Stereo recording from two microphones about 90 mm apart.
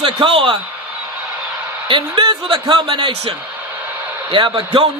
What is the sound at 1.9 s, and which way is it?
A man's voice, 65° right (ahead or behind).